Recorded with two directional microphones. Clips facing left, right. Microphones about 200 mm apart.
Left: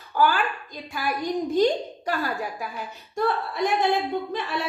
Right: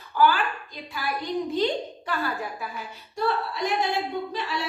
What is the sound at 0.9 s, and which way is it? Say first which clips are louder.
A woman's voice: left 2 dB; 45° left (ahead or behind).